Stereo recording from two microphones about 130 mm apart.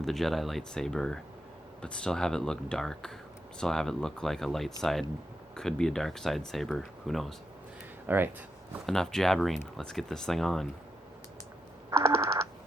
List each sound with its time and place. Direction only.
0.0 s speech: centre (ahead or behind)
8.0 s speech: 15° right (ahead or behind)
8.9 s speech: 5° left (ahead or behind)
11.9 s a sound: 20° right (ahead or behind)